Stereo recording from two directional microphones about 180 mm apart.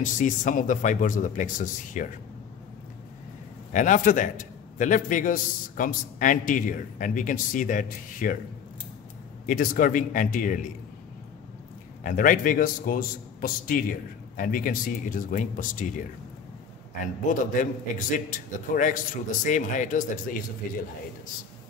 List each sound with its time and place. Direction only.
0.0 s a man's voice: 45° left (ahead or behind)
3.7 s a man's voice: 45° left (ahead or behind)
9.5 s a man's voice: 50° left (ahead or behind)
12.0 s a man's voice: 50° left (ahead or behind)
17.0 s a man's voice: 45° left (ahead or behind)